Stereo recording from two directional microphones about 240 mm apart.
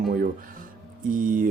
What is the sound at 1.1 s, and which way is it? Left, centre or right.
Speech, right.